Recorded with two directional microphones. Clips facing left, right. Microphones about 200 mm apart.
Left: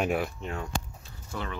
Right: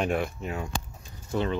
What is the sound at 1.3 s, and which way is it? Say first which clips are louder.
Speech: right 8 dB; 20° right (ahead or behind).